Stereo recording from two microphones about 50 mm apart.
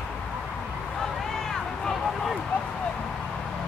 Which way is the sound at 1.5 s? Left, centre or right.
Centre.